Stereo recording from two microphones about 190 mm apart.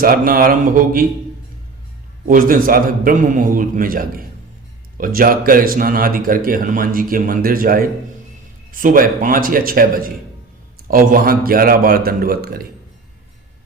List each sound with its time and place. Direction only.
0.0 s speech: 50° right (ahead or behind)
2.2 s speech: 45° right (ahead or behind)